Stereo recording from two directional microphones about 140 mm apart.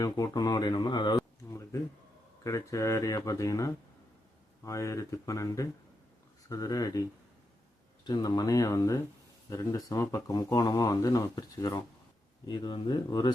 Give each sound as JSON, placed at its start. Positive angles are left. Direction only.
{"t": 0.0, "sound": "speech", "side_deg": 25}
{"t": 1.5, "sound": "a sound", "side_deg": 20}
{"t": 2.4, "sound": "speech", "side_deg": 25}